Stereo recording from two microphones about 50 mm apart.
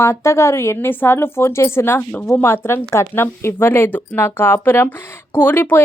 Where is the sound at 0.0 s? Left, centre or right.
Left.